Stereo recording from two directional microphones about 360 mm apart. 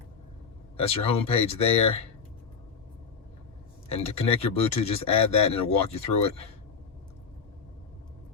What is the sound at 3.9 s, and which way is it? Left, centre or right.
Speech, centre.